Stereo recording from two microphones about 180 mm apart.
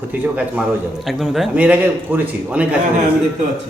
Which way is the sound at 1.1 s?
Centre (ahead or behind).